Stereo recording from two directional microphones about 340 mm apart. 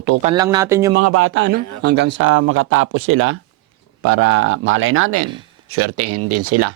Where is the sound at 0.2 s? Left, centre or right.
Centre.